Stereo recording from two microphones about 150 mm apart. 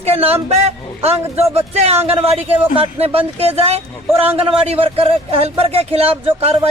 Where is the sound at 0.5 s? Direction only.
45° right (ahead or behind).